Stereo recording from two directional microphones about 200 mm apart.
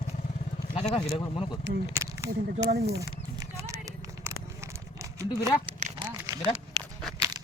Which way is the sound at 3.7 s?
15° right (ahead or behind).